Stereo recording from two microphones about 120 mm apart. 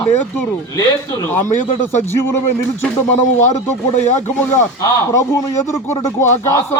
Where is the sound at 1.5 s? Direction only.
90° left.